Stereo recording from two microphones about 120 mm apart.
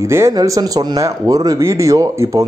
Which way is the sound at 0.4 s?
35° right (ahead or behind).